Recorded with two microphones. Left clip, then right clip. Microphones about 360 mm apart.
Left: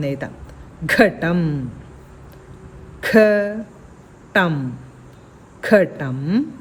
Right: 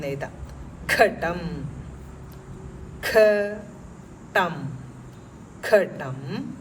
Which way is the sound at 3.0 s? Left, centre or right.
Left.